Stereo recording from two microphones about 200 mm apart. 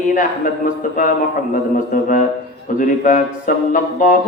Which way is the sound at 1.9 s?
40° left (ahead or behind).